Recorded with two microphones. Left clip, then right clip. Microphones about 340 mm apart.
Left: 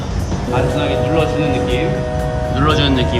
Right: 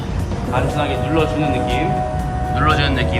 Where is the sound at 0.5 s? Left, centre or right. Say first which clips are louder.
Left 3 dB; centre.